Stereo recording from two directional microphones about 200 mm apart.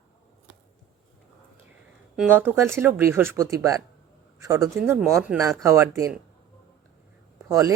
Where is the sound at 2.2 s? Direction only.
10° right (ahead or behind).